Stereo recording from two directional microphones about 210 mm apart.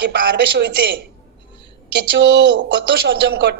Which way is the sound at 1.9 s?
55° right (ahead or behind).